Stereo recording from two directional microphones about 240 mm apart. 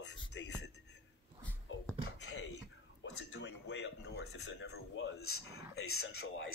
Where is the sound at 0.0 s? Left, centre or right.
Left.